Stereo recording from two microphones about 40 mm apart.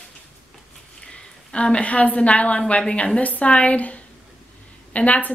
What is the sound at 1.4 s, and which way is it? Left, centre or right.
Speech, left.